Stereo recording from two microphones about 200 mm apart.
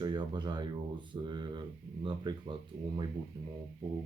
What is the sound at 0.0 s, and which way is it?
Speech, 25° right (ahead or behind).